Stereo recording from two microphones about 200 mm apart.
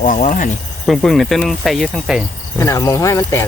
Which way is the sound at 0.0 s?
40° left (ahead or behind).